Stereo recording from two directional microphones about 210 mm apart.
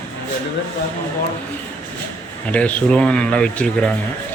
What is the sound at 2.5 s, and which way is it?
Speech, 5° left (ahead or behind).